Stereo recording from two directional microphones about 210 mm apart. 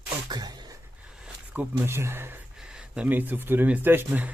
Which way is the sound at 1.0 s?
5° right (ahead or behind).